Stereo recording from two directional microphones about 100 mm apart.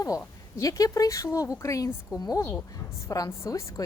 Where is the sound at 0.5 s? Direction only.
35° left (ahead or behind).